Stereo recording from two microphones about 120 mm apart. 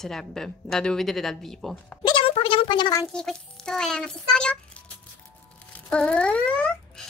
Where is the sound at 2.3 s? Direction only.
50° left (ahead or behind).